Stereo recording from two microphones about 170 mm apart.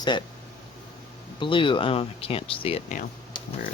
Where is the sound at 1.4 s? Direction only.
30° left (ahead or behind).